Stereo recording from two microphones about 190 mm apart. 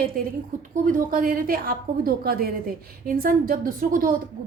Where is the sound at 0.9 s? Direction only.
45° right (ahead or behind).